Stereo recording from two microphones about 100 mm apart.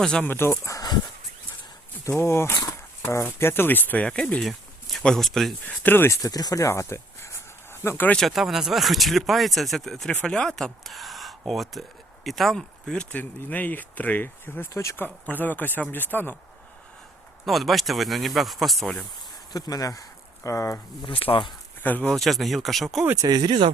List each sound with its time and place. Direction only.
0.0 s speech: 5° left (ahead or behind)
0.3 s speech: 25° left (ahead or behind)
2.0 s speech: 25° left (ahead or behind); by 5.5 s 5° left (ahead or behind)
5.6 s speech: 20° left (ahead or behind)
6.2 s a sound: 35° left (ahead or behind)
8.1 s speech: centre (ahead or behind); by 16.3 s 20° left (ahead or behind)
17.4 s speech: centre (ahead or behind)
19.5 s speech: 40° left (ahead or behind)
21.0 s speech: 65° left (ahead or behind)
21.8 s speech: 15° left (ahead or behind)
22.1 s speech: centre (ahead or behind)
23.1 s speech: 45° right (ahead or behind)